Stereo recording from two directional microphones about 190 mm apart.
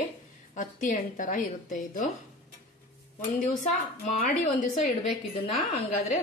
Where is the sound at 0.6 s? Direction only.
45° left (ahead or behind).